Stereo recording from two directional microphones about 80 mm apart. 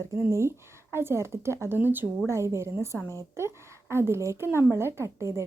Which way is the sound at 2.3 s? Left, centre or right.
Right.